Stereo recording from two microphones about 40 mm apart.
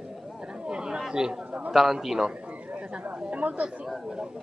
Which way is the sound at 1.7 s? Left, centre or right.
Centre.